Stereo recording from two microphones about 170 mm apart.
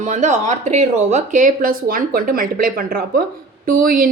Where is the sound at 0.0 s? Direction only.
45° right (ahead or behind).